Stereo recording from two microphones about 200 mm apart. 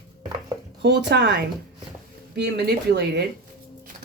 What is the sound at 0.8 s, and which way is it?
Speech, 60° right (ahead or behind).